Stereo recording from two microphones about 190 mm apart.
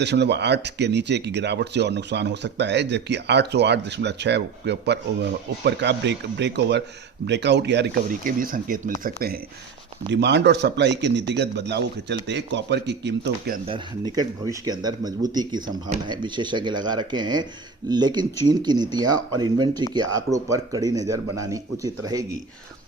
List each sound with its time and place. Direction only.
0.0 s speech: 65° right (ahead or behind)
8.2 s speech: 45° right (ahead or behind)
10.1 s speech: 65° right (ahead or behind)
13.7 s a man's voice: 25° right (ahead or behind)